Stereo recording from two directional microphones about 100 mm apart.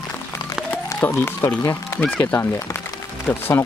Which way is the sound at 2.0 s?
10° left (ahead or behind).